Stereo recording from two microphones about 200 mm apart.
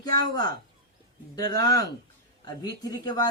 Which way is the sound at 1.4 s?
50° right (ahead or behind).